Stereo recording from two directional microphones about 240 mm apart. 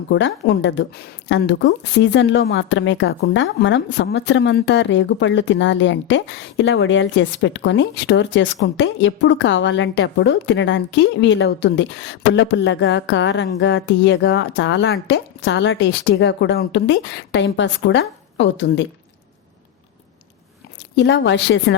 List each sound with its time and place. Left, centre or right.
0.1 s a woman's voice: left
20.9 s a woman's voice: left